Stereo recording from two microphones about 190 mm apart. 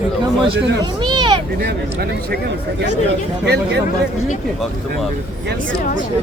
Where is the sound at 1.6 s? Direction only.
60° right (ahead or behind).